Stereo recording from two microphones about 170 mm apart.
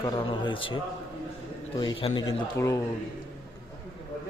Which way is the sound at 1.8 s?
30° left (ahead or behind).